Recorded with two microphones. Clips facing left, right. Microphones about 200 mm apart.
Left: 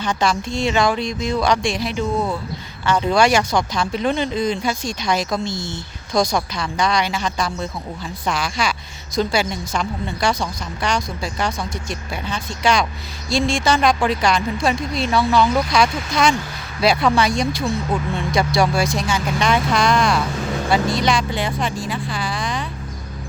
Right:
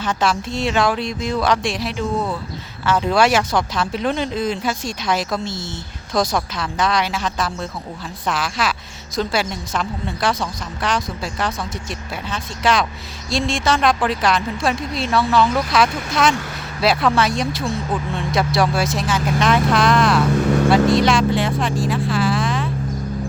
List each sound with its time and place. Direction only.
0.0 s a woman's voice: 5° right (ahead or behind)